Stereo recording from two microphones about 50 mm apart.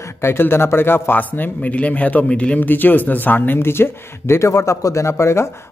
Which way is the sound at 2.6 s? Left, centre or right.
Left.